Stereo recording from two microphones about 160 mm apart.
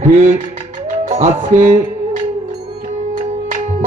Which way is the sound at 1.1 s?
50° right (ahead or behind).